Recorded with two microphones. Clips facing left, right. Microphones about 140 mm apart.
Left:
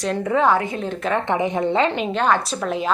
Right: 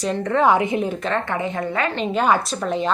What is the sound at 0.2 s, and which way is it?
Speech, 10° left (ahead or behind).